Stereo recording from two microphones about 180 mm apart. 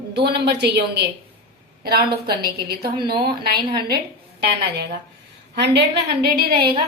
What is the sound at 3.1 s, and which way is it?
Speech, 25° right (ahead or behind).